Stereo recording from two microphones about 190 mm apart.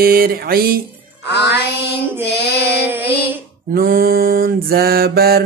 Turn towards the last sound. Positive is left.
turn(degrees=-55)  # may be behind; listen again after turning